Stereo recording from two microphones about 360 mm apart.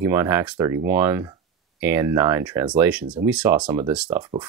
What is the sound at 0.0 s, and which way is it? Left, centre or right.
Speech, centre.